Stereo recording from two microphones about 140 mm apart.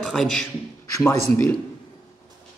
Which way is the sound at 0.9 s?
15° left (ahead or behind).